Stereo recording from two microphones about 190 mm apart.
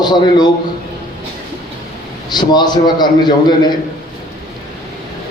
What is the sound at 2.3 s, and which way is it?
A man's voice, 20° left (ahead or behind).